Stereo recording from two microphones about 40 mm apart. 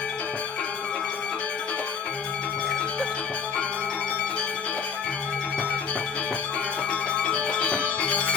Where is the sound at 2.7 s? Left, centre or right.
Left.